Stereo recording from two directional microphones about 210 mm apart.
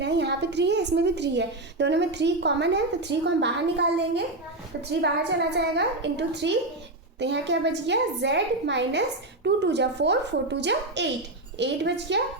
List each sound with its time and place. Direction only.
0.0 s a woman's voice: 55° right (ahead or behind)